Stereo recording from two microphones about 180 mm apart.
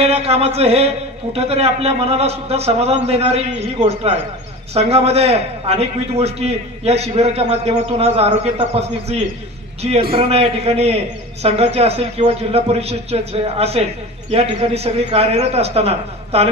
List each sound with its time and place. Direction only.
0.0 s a man's voice: 35° right (ahead or behind)